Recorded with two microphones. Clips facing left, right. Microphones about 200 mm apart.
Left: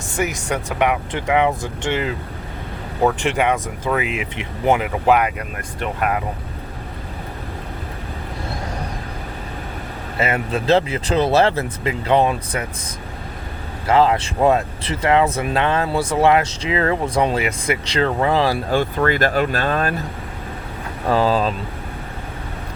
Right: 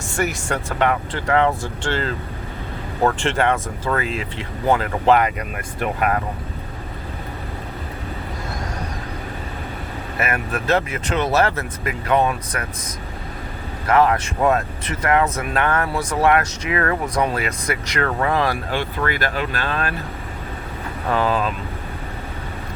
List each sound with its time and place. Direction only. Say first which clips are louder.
0.2 s speech: left 1 dB; 20° left (ahead or behind); by 6.1 s centre (ahead or behind)
10.2 s speech: left 3 dB; 25° left (ahead or behind)
13.8 s speech: left 1 dB; 25° left (ahead or behind)
18.7 s speech: left 5 dB; 40° left (ahead or behind)
21.1 s speech: left 3 dB; 35° left (ahead or behind)